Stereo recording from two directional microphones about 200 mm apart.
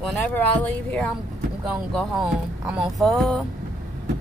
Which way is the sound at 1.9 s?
5° right (ahead or behind).